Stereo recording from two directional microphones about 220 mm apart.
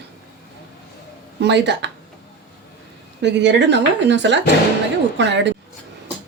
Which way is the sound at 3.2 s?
50° right (ahead or behind).